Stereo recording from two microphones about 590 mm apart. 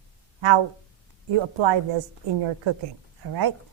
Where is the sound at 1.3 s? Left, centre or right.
Right.